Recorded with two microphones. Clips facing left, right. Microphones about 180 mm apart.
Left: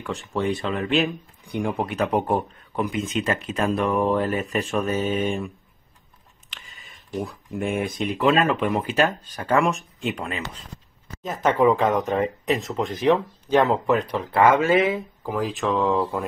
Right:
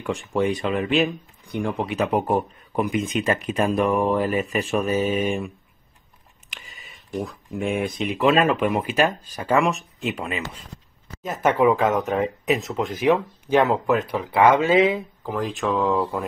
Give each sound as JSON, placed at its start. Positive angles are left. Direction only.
{"t": 0.0, "sound": "speech", "side_deg": -10}
{"t": 1.5, "sound": "speech", "side_deg": 10}
{"t": 1.9, "sound": "speech", "side_deg": -5}
{"t": 7.2, "sound": "speech", "side_deg": 0}
{"t": 8.3, "sound": "speech", "side_deg": -15}
{"t": 15.2, "sound": "speech", "side_deg": 5}